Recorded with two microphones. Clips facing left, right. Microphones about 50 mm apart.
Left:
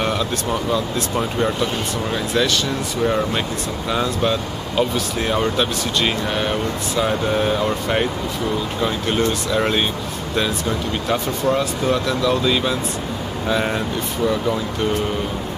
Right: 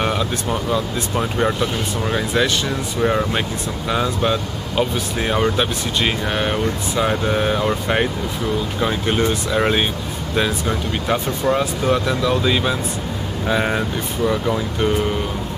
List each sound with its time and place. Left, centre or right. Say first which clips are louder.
0.0 s speech: even; centre